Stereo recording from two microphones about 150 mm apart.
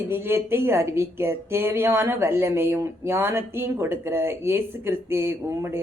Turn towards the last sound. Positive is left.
turn(degrees=-15)  # may be behind; listen again after turning